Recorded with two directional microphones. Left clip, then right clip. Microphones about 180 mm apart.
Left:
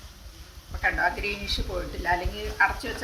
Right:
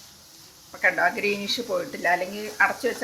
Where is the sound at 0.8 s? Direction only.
55° right (ahead or behind).